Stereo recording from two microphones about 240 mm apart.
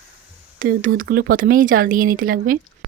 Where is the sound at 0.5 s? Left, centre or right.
Right.